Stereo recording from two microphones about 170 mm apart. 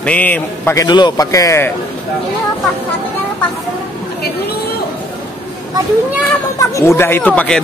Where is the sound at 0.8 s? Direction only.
25° left (ahead or behind).